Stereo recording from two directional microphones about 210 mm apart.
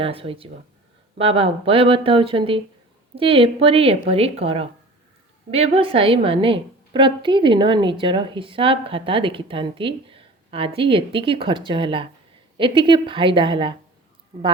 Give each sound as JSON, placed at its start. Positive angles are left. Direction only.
{"t": 0.0, "sound": "a woman's voice", "side_deg": -25}